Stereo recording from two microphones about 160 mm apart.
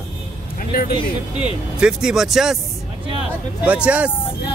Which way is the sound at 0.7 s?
70° left (ahead or behind).